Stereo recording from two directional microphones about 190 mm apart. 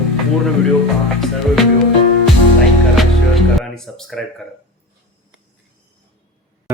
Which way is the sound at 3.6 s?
Centre (ahead or behind).